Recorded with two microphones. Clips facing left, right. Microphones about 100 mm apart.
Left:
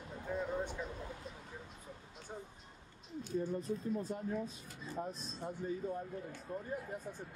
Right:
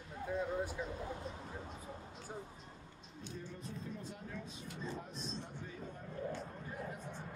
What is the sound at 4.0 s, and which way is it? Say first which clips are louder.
Speech: left 9 dB; 40° left (ahead or behind).